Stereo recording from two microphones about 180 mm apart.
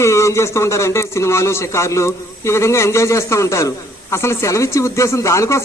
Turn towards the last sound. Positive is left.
turn(degrees=15)  # may be behind; listen again after turning